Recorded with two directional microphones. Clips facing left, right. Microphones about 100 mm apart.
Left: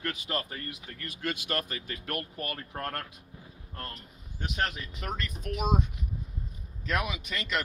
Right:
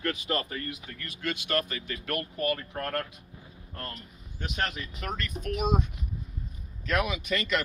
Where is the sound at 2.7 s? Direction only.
20° left (ahead or behind).